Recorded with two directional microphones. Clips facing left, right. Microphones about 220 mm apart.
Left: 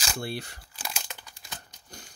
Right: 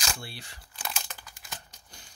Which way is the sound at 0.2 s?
50° left (ahead or behind).